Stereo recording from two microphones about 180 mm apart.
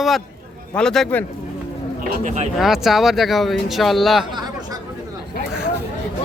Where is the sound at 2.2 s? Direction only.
40° right (ahead or behind).